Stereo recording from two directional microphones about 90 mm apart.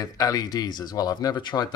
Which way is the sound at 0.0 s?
45° left (ahead or behind).